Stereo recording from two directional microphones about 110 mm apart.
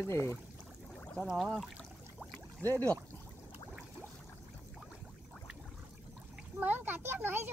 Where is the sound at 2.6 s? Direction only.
20° left (ahead or behind).